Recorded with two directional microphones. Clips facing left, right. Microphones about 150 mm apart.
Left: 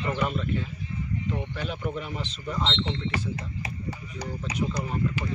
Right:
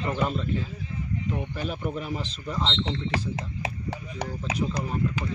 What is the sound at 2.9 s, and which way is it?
Speech, 90° right.